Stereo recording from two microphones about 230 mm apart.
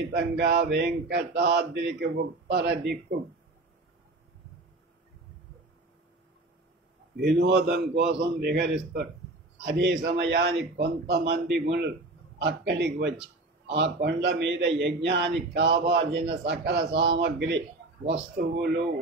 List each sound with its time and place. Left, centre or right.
0.1 s speech: right
7.2 s speech: right
18.0 s speech: right